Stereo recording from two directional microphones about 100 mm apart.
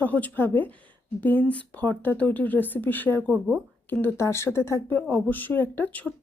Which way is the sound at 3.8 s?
25° left (ahead or behind).